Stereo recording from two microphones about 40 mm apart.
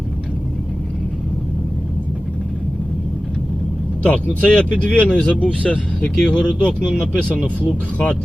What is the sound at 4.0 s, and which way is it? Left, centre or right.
Speech, left.